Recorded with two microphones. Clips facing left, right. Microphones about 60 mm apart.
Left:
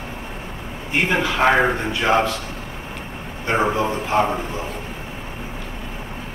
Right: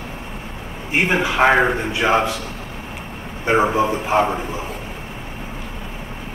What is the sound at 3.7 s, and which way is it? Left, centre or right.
Speech, centre.